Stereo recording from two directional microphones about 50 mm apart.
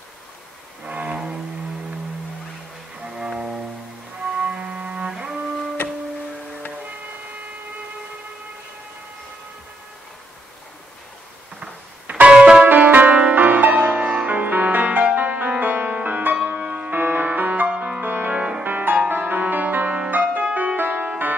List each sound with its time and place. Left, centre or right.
0.8 s music: right
3.1 s music: centre
4.2 s cello: right
5.1 s music: centre
11.6 s music: right
12.6 s music: right